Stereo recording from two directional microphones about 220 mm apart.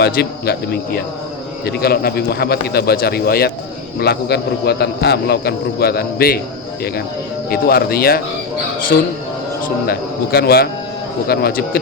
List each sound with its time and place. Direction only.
0.0 s speech: 45° left (ahead or behind)
7.5 s speech: 45° left (ahead or behind)